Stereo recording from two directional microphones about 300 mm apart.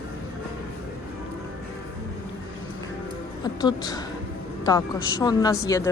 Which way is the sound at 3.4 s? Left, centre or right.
Centre.